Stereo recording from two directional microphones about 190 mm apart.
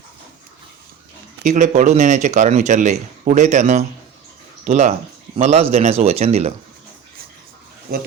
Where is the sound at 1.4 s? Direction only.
40° right (ahead or behind).